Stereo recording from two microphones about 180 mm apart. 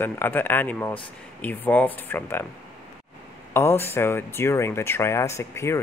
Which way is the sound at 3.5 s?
15° left (ahead or behind).